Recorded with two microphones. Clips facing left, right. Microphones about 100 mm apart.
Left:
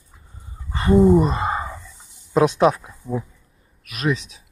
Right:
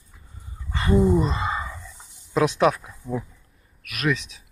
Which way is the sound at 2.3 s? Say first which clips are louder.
Left 3 dB; 35° left (ahead or behind).